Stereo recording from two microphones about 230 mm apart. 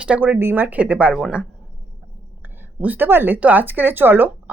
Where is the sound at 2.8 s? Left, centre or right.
Centre.